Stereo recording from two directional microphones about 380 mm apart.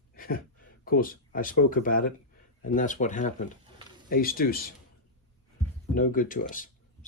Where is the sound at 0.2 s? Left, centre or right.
Left.